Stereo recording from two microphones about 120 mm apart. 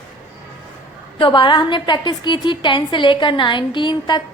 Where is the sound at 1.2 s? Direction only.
45° left (ahead or behind).